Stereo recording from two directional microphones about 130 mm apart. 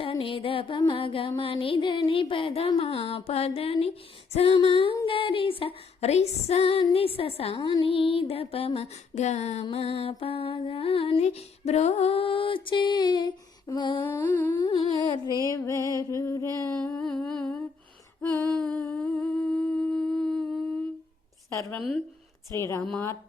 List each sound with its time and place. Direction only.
0.0 s music: 45° left (ahead or behind)
14.0 s humming: 20° left (ahead or behind)
14.7 s music: 40° left (ahead or behind); by 16.5 s 20° left (ahead or behind)
16.7 s humming: 10° left (ahead or behind)
21.8 s a woman's voice: centre (ahead or behind)
22.5 s music: 20° left (ahead or behind)
22.8 s humming: 5° left (ahead or behind)